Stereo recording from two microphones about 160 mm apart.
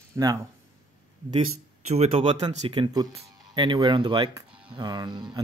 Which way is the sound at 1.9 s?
40° right (ahead or behind).